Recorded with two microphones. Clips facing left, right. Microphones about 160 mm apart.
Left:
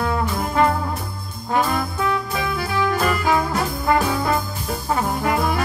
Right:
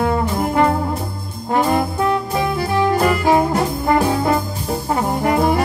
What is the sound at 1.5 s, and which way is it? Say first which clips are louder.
Brass instrument: right 4 dB; 35° right (ahead or behind).